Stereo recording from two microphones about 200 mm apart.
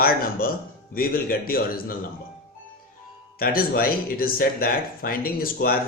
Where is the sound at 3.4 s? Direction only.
45° left (ahead or behind).